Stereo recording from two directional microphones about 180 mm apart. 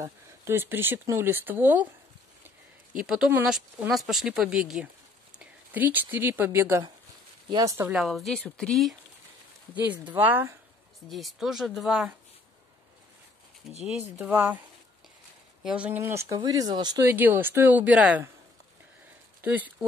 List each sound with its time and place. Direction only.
0.0 s speech: 15° right (ahead or behind)
3.0 s speech: 5° right (ahead or behind)
7.9 s speech: centre (ahead or behind)
9.8 s speech: 10° right (ahead or behind)
11.1 s speech: centre (ahead or behind)
13.8 s speech: 5° right (ahead or behind)
15.6 s speech: 5° right (ahead or behind); by 17.1 s 20° right (ahead or behind)
17.1 s speech: 10° right (ahead or behind)
19.4 s speech: 10° right (ahead or behind)